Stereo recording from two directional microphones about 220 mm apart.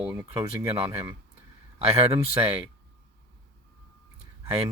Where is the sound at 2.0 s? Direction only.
25° right (ahead or behind).